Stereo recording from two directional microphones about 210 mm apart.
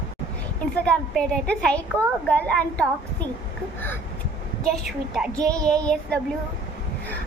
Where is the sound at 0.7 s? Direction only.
5° left (ahead or behind).